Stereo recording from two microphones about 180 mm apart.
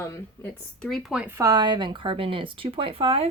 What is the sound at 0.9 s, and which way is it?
Speech, centre (ahead or behind).